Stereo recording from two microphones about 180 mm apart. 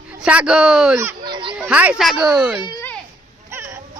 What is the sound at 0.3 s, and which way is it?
Speech, 5° right (ahead or behind).